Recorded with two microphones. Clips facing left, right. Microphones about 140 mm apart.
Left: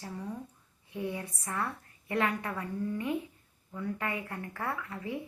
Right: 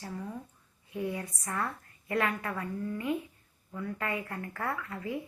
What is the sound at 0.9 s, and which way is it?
A woman's voice, 25° left (ahead or behind).